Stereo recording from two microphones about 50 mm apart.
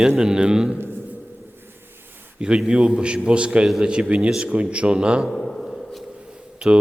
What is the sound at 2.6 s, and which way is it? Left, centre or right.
A man's voice, centre.